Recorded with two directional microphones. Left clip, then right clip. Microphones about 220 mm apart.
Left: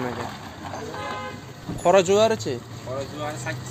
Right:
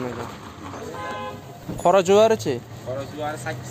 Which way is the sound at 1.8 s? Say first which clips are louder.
Right 2 dB; 25° right (ahead or behind).